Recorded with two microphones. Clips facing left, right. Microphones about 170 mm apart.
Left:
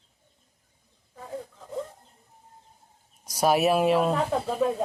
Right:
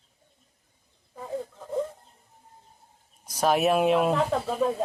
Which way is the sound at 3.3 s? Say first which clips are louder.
Left 1 dB; 10° left (ahead or behind).